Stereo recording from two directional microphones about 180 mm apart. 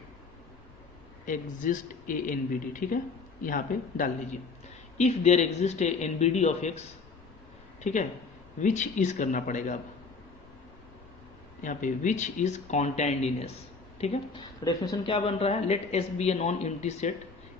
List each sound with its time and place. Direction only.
1.2 s speech: 50° left (ahead or behind)
7.9 s speech: 40° left (ahead or behind)
11.6 s speech: 45° left (ahead or behind)
14.6 s speech: 20° left (ahead or behind); by 17.1 s 40° left (ahead or behind)